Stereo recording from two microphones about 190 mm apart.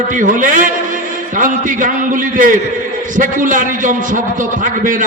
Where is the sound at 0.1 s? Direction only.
45° right (ahead or behind).